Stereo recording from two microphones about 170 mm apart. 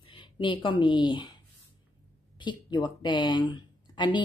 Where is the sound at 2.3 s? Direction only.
25° left (ahead or behind).